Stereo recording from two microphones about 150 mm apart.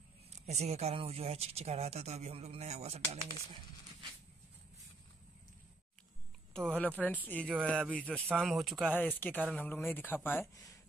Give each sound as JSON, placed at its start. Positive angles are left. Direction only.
{"t": 0.5, "sound": "speech", "side_deg": -45}
{"t": 6.5, "sound": "speech", "side_deg": 5}
{"t": 8.9, "sound": "speech", "side_deg": 10}